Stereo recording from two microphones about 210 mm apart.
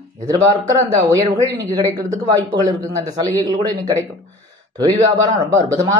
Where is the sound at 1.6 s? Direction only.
20° right (ahead or behind).